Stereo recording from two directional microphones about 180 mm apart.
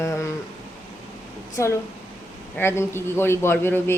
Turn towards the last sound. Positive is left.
turn(degrees=10)  # may be behind; listen again after turning